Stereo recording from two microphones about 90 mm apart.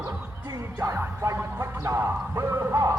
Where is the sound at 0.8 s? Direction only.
35° right (ahead or behind).